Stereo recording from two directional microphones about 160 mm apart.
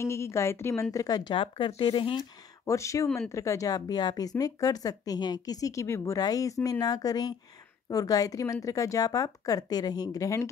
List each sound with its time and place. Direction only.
0.0 s a woman's voice: 15° left (ahead or behind); by 2.2 s 30° left (ahead or behind)
2.6 s speech: 20° left (ahead or behind)